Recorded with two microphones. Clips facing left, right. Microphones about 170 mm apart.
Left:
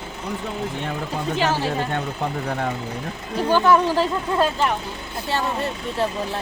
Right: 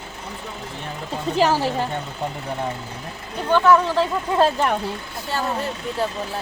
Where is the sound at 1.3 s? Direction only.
40° right (ahead or behind).